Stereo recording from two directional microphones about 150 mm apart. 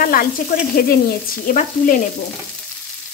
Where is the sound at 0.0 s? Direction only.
75° left (ahead or behind).